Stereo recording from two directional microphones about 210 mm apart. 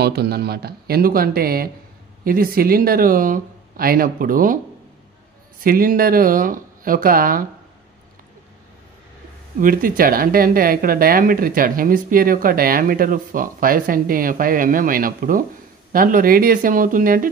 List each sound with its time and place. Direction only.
0.0 s speech: 50° right (ahead or behind)
5.6 s speech: 45° right (ahead or behind)
9.6 s speech: 40° right (ahead or behind)